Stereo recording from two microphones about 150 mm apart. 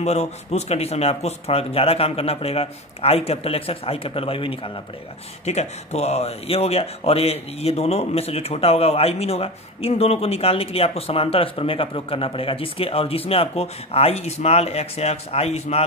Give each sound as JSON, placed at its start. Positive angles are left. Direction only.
{"t": 0.0, "sound": "speech", "side_deg": 45}